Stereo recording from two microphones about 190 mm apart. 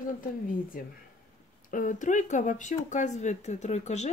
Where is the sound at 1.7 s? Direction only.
45° left (ahead or behind).